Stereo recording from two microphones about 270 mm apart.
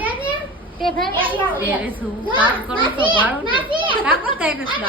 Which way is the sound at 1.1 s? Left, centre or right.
Centre.